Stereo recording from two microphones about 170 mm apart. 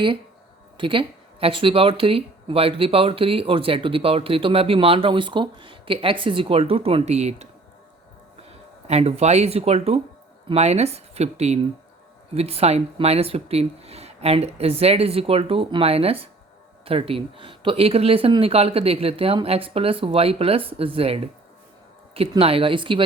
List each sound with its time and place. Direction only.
0.8 s speech: 30° right (ahead or behind)
8.4 s speech: 40° right (ahead or behind)